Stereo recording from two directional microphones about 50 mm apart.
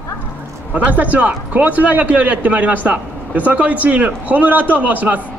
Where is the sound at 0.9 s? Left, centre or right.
Right.